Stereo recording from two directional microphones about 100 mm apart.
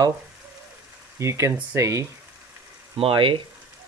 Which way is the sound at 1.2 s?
30° right (ahead or behind).